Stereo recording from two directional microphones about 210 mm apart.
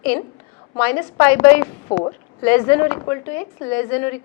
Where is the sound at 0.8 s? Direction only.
10° left (ahead or behind).